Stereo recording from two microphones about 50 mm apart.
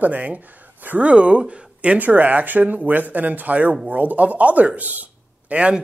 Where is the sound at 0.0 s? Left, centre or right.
Right.